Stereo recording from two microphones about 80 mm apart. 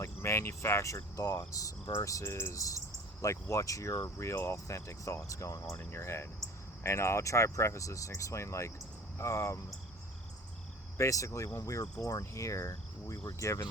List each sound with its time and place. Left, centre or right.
0.0 s speech: left
2.0 s cricket: left
3.5 s speech: left
10.9 s speech: left